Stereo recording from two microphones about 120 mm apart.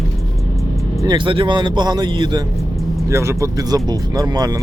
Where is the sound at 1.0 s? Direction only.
40° right (ahead or behind).